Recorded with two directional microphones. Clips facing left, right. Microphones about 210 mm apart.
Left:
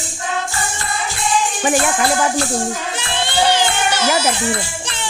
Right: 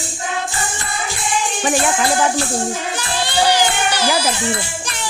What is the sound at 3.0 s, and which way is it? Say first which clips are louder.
Music: left 1 dB; 25° left (ahead or behind).